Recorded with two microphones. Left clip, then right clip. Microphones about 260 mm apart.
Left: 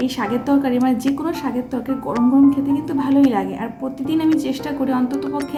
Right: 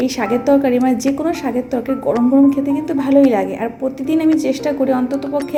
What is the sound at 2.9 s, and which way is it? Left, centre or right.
Speech, left.